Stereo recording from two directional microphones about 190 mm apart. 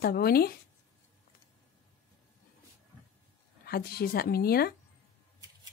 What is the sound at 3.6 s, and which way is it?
Speech, 55° left (ahead or behind).